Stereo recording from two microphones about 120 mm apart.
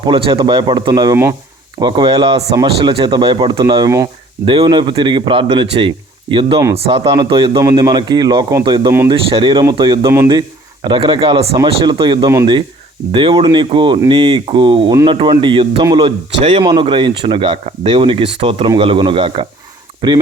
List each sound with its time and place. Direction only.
0.0 s a man's voice: 45° right (ahead or behind)
1.1 s speech: 20° right (ahead or behind)
1.8 s a man's voice: 40° right (ahead or behind)
3.8 s speech: 25° right (ahead or behind)
4.4 s a man's voice: 40° right (ahead or behind)